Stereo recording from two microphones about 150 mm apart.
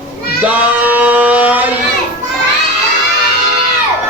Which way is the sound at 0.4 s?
10° right (ahead or behind).